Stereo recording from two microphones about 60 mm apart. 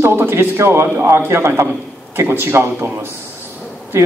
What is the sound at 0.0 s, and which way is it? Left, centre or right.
A man's voice, right.